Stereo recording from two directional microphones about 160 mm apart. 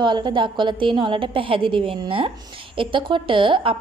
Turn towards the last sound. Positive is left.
turn(degrees=-30)  # may be behind; listen again after turning